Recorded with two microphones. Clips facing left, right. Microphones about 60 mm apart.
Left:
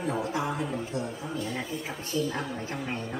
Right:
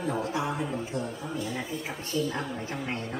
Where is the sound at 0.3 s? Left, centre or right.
Centre.